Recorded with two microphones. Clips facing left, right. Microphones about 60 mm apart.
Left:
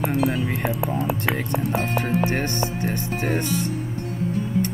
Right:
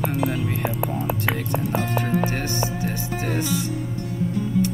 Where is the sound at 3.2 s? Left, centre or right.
Left.